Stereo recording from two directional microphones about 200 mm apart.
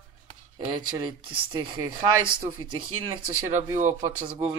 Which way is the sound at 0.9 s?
20° right (ahead or behind).